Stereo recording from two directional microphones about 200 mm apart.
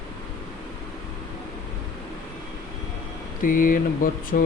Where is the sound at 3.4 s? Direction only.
45° left (ahead or behind).